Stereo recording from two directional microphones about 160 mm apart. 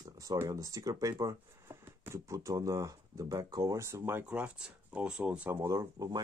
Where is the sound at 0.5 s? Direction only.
20° right (ahead or behind).